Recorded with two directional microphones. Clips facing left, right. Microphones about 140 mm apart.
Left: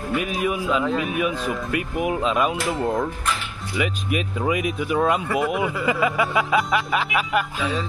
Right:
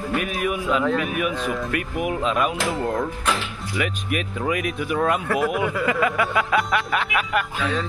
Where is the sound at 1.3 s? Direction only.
Centre (ahead or behind).